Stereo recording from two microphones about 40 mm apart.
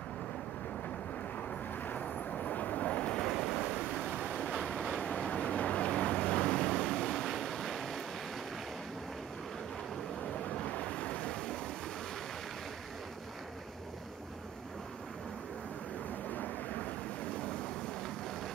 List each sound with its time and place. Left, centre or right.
2.0 s vehicle: left
3.3 s waves: centre
5.1 s vehicle: left
7.2 s waves: centre
10.5 s waves: left
16.3 s vehicle: left